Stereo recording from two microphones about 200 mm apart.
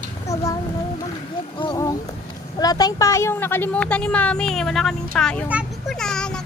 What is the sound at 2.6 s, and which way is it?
A child's voice, 20° left (ahead or behind).